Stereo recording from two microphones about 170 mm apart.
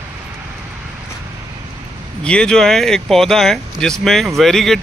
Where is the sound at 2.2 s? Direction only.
5° left (ahead or behind).